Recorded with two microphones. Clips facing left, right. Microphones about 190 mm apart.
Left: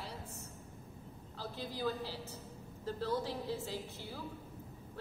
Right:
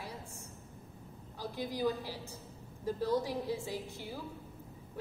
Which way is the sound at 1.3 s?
15° right (ahead or behind).